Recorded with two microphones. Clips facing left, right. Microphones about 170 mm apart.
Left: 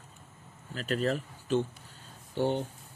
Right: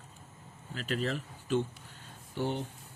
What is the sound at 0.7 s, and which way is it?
Speech, 40° left (ahead or behind).